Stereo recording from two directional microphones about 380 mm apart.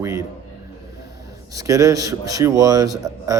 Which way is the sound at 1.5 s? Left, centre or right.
Centre.